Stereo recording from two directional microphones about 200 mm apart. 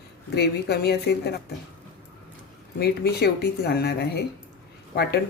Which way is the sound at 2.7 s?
50° left (ahead or behind).